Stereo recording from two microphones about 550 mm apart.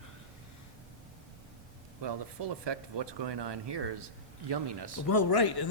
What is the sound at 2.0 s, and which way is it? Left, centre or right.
Speech, right.